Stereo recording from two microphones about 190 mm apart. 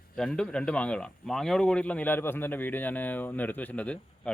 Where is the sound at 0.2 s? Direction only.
5° left (ahead or behind).